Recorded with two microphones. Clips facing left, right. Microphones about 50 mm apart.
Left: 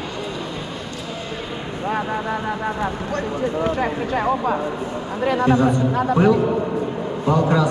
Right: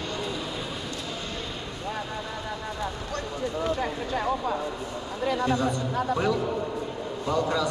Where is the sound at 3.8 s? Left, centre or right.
Left.